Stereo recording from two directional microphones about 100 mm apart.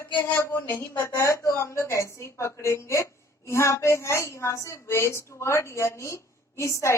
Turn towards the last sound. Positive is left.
turn(degrees=30)  # may be behind; listen again after turning